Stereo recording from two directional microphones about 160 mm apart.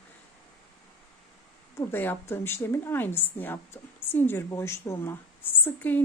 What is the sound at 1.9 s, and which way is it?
A woman's voice, 15° left (ahead or behind).